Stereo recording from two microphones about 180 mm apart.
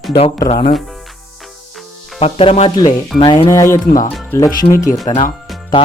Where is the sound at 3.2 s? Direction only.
20° left (ahead or behind).